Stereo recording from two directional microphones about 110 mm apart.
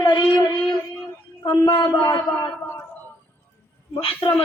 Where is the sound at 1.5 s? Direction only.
45° left (ahead or behind).